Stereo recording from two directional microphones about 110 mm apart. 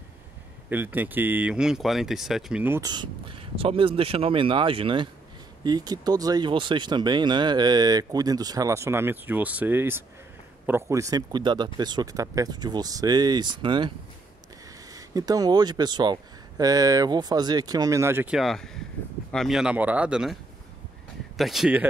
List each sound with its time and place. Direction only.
0.7 s speech: 20° right (ahead or behind)
2.8 s speech: 40° right (ahead or behind)
5.6 s speech: 40° right (ahead or behind)
14.9 s speech: 35° right (ahead or behind)
18.2 s speech: centre (ahead or behind)
21.4 s speech: centre (ahead or behind)